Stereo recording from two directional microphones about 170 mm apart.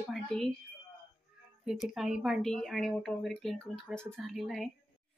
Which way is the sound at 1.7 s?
Centre (ahead or behind).